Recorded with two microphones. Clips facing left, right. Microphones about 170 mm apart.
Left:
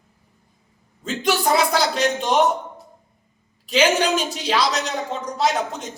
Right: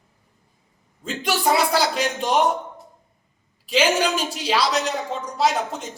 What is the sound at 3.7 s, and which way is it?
A woman's voice, 5° right (ahead or behind).